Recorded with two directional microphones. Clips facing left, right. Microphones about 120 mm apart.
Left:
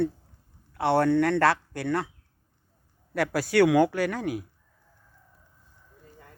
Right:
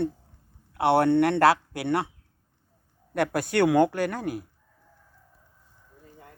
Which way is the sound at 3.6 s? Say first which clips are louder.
Left 1 dB; 15° right (ahead or behind).